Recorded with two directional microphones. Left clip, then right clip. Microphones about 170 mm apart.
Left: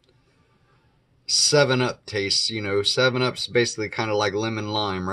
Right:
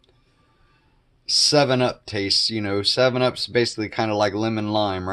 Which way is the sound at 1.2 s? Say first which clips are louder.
Right 1 dB; 30° right (ahead or behind).